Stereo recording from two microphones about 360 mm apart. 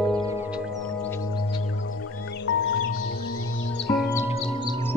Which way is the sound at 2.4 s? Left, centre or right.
Left.